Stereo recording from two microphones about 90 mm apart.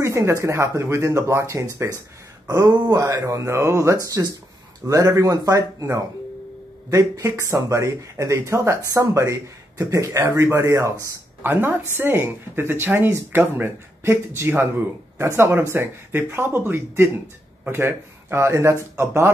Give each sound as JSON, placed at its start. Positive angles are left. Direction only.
{"t": 0.0, "sound": "speech", "side_deg": -35}